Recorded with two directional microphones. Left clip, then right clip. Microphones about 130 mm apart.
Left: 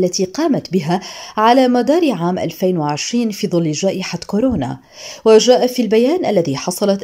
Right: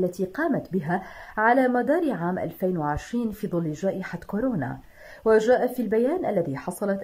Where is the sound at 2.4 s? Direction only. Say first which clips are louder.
Left 9 dB; 35° left (ahead or behind).